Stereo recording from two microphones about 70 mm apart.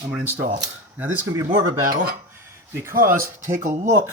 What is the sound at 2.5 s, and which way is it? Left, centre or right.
Speech, right.